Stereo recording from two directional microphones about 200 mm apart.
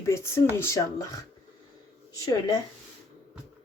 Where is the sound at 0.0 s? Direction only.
15° left (ahead or behind).